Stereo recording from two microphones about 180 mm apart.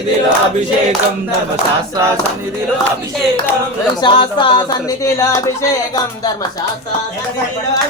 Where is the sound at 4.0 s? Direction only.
25° left (ahead or behind).